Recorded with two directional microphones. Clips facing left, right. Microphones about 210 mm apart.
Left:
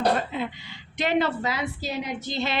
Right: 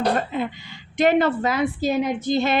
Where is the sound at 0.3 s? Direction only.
50° right (ahead or behind).